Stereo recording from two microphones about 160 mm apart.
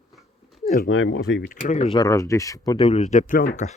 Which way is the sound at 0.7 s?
70° left (ahead or behind).